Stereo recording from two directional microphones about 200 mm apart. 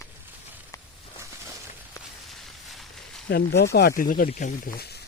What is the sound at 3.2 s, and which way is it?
Speech, 55° left (ahead or behind).